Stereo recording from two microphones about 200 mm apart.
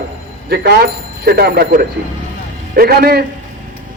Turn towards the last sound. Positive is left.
turn(degrees=-50)  # may be behind; listen again after turning